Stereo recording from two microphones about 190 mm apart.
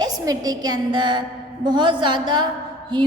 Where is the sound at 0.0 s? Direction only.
20° right (ahead or behind).